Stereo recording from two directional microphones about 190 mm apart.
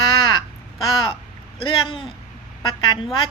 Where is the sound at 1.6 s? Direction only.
25° left (ahead or behind).